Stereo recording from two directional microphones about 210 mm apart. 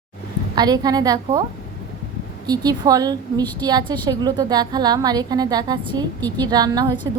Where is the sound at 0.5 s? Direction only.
20° right (ahead or behind).